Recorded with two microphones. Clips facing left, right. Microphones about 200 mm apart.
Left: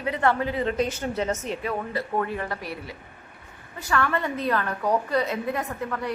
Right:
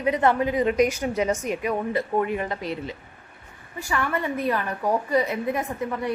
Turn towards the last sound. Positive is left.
turn(degrees=-20)  # may be behind; listen again after turning